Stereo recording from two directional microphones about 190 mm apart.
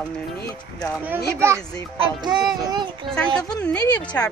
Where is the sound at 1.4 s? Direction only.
15° right (ahead or behind).